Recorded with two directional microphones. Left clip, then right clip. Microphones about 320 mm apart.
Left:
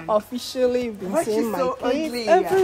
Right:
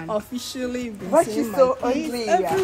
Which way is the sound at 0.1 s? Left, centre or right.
Centre.